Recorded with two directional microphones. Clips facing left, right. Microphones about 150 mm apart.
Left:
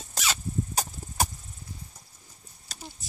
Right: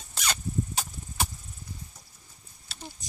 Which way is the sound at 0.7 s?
40° left (ahead or behind).